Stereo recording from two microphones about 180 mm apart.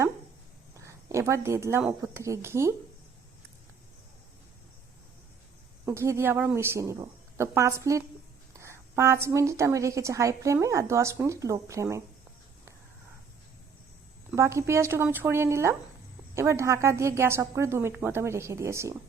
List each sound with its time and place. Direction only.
0.8 s a woman's voice: 15° right (ahead or behind)
5.8 s a woman's voice: 15° right (ahead or behind)
14.3 s a woman's voice: 15° right (ahead or behind)